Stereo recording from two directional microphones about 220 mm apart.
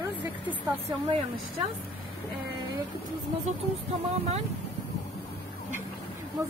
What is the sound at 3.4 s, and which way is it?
Speech, 30° right (ahead or behind).